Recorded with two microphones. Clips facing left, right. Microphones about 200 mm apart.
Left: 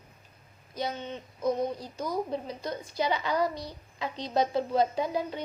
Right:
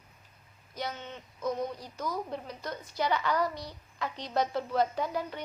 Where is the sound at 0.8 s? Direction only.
15° left (ahead or behind).